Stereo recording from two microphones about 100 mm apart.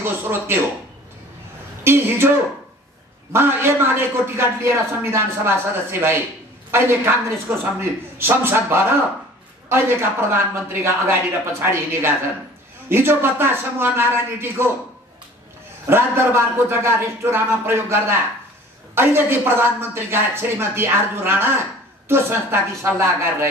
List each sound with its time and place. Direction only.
0.0 s a man's voice: 20° right (ahead or behind)
1.9 s a man's voice: 25° right (ahead or behind)
3.3 s a man's voice: 25° right (ahead or behind)
15.9 s a man's voice: 25° right (ahead or behind)